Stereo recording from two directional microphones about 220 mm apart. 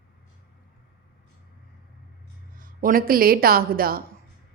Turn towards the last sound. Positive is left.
turn(degrees=-40)  # may be behind; listen again after turning